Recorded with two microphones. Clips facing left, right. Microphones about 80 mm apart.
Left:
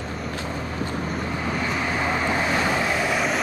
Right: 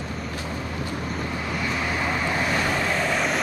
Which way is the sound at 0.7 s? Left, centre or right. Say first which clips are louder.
Left 3 dB; left.